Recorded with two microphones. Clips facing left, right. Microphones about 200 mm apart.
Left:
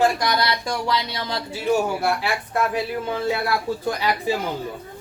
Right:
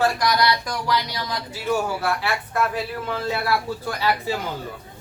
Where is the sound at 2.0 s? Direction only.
15° left (ahead or behind).